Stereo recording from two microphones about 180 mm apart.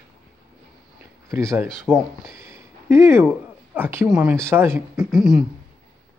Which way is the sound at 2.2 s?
15° right (ahead or behind).